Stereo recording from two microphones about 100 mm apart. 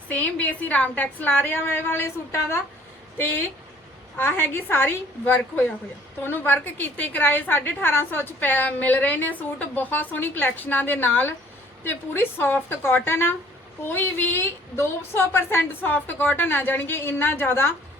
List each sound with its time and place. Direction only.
0.1 s a woman's voice: 15° left (ahead or behind)